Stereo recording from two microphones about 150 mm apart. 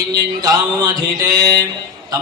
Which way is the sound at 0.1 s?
25° right (ahead or behind).